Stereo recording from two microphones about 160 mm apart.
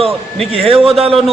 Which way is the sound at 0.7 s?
35° right (ahead or behind).